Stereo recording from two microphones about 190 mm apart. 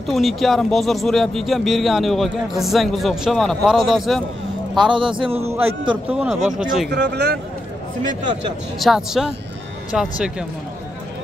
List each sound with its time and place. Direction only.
0.0 s speech: centre (ahead or behind)
4.9 s a man's voice: 25° right (ahead or behind)
5.4 s a man's voice: 15° right (ahead or behind)
6.9 s speech: 60° right (ahead or behind)
8.7 s speech: centre (ahead or behind)